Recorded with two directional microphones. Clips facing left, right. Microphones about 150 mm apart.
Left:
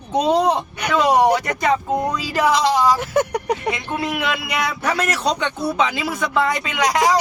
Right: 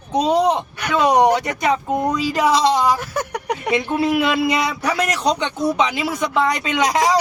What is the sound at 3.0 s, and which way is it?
Speech, 25° left (ahead or behind).